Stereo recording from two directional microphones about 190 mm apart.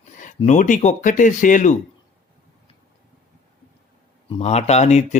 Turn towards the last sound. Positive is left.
turn(degrees=35)  # may be behind; listen again after turning